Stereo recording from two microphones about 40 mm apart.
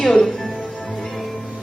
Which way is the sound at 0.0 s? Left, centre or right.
Centre.